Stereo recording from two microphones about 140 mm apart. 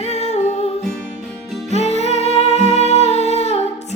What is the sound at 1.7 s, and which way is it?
Music, 50° left (ahead or behind).